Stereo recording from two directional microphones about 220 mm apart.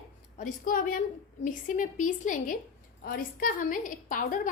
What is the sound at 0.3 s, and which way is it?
A woman's voice, 35° left (ahead or behind).